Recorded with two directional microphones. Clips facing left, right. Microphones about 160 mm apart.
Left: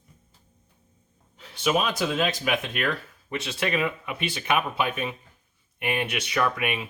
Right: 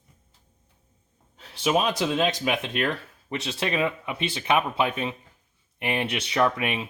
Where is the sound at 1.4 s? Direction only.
35° right (ahead or behind).